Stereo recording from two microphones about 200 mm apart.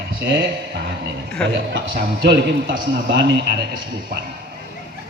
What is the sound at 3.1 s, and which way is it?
Speech, 65° right (ahead or behind).